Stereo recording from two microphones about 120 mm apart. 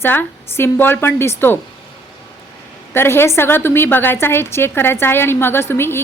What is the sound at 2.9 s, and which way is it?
A woman's voice, 20° left (ahead or behind).